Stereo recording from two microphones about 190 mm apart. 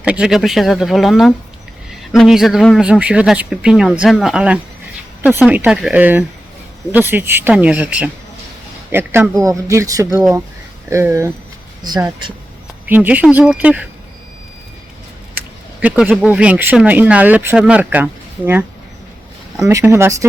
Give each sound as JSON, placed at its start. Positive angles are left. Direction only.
{"t": 0.0, "sound": "speech", "side_deg": -5}
{"t": 15.4, "sound": "speech", "side_deg": -5}
{"t": 19.6, "sound": "speech", "side_deg": -15}